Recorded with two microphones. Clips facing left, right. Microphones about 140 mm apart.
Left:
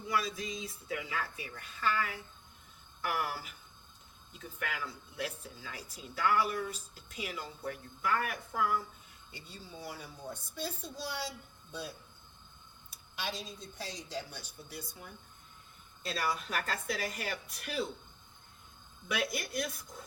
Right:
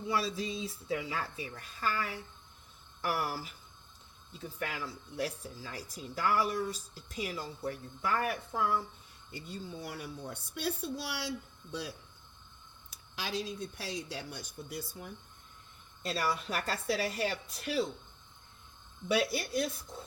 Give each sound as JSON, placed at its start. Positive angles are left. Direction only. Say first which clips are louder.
{"t": 0.1, "sound": "speech", "louder": "right 1 dB", "side_deg": -30}
{"t": 9.3, "sound": "speech", "louder": "right 7 dB", "side_deg": -55}
{"t": 12.9, "sound": "speech", "louder": "right 2 dB", "side_deg": -90}
{"t": 16.0, "sound": "speech", "louder": "right 2 dB", "side_deg": -35}
{"t": 19.0, "sound": "speech", "louder": "right 5 dB", "side_deg": -30}